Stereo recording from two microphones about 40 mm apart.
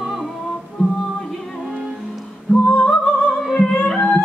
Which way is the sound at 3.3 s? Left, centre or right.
Centre.